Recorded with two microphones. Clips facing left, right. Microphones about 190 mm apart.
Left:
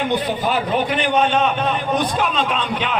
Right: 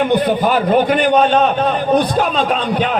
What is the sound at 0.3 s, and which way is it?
A man's voice, 55° right (ahead or behind).